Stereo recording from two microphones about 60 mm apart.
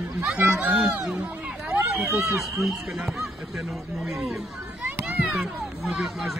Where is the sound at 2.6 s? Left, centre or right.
Centre.